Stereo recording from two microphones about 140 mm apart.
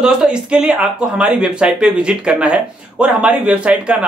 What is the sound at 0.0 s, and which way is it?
Speech, 5° right (ahead or behind).